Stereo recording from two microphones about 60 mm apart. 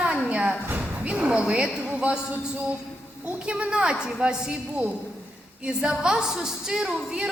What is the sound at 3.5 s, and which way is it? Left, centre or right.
A woman's voice, centre.